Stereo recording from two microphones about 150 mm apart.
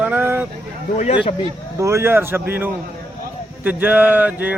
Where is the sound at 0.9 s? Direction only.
40° left (ahead or behind).